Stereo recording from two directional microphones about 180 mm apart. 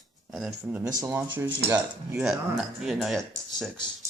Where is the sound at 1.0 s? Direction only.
15° right (ahead or behind).